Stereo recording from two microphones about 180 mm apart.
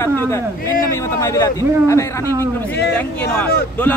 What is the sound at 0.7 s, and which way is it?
A man's voice, 15° left (ahead or behind).